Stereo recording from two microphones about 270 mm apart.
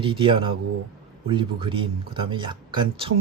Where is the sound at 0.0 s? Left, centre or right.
Centre.